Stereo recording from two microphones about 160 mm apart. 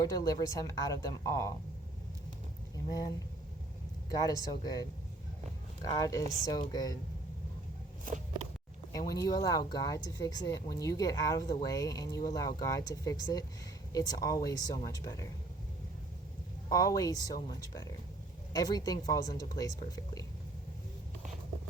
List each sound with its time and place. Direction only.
0.0 s speech: 20° left (ahead or behind)
4.1 s speech: 20° left (ahead or behind)
8.9 s speech: 20° left (ahead or behind)
16.6 s speech: 20° left (ahead or behind)
18.5 s speech: 25° left (ahead or behind)